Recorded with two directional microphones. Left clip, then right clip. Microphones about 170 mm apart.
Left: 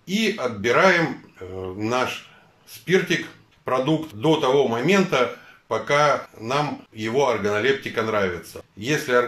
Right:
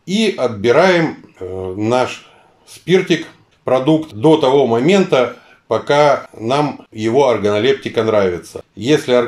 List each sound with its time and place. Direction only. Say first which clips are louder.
0.0 s speech: right 7 dB; 25° right (ahead or behind)